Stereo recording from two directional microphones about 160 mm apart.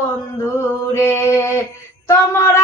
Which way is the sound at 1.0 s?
15° left (ahead or behind).